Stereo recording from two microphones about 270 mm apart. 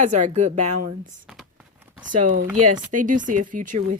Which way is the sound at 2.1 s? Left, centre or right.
Right.